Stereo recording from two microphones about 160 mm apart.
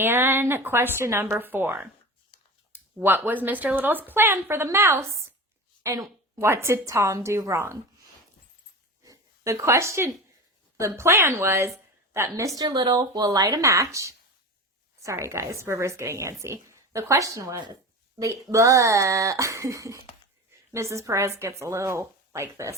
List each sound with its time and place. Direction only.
0.0 s a woman's voice: 15° right (ahead or behind)
9.0 s a sound: 20° right (ahead or behind)
10.8 s a woman's voice: 15° right (ahead or behind)